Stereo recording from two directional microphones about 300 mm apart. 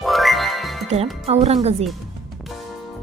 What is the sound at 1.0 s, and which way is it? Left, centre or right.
Speech, centre.